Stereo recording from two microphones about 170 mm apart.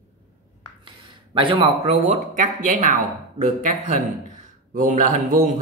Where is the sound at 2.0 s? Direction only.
45° right (ahead or behind).